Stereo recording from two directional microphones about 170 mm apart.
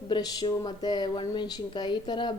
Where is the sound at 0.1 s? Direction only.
25° left (ahead or behind).